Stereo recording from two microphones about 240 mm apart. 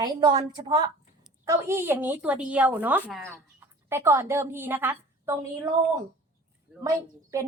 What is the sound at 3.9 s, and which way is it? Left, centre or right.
A woman's voice, centre.